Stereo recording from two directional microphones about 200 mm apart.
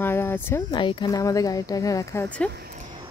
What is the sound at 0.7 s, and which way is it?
Speech, 20° left (ahead or behind).